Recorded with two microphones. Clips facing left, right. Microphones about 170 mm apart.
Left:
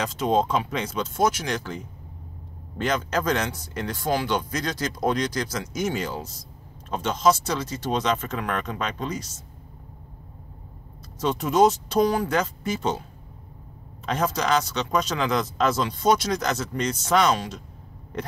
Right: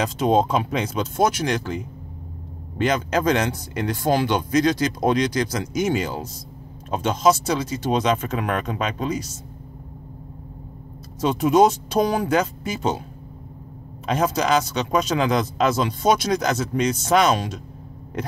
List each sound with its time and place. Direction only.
0.0 s speech: 10° right (ahead or behind)
2.8 s speech: 10° right (ahead or behind)
4.1 s speech: 20° right (ahead or behind)
4.6 s speech: 10° right (ahead or behind)
11.1 s speech: 10° right (ahead or behind)
14.0 s speech: 10° right (ahead or behind)